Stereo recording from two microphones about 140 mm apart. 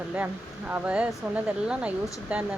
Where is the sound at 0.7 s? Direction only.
10° right (ahead or behind).